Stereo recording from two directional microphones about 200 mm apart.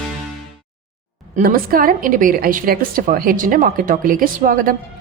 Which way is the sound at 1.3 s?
45° right (ahead or behind).